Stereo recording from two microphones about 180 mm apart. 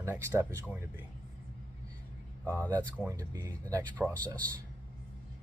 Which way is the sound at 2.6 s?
10° left (ahead or behind).